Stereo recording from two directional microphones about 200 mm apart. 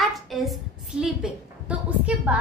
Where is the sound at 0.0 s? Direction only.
Centre (ahead or behind).